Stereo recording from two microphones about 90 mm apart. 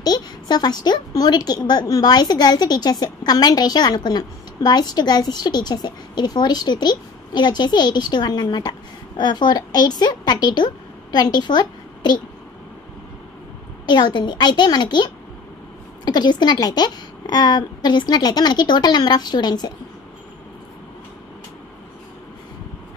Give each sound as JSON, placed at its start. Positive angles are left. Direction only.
{"t": 0.0, "sound": "a woman's voice", "side_deg": 50}
{"t": 13.8, "sound": "a woman's voice", "side_deg": 55}
{"t": 16.1, "sound": "a woman's voice", "side_deg": 55}